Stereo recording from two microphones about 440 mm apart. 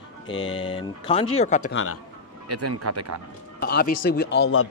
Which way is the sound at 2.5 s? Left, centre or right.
Right.